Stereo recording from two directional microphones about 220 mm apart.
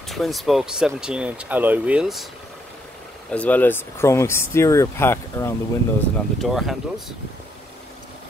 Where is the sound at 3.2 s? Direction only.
5° left (ahead or behind).